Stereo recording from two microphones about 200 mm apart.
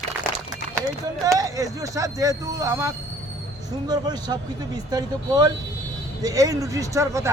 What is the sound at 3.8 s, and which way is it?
Speech, 20° right (ahead or behind).